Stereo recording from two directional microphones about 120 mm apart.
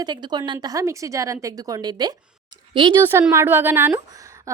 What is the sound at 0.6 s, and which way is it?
Speech, 30° right (ahead or behind).